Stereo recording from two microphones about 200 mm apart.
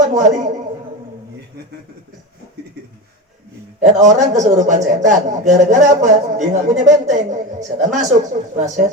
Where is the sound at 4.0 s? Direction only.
35° right (ahead or behind).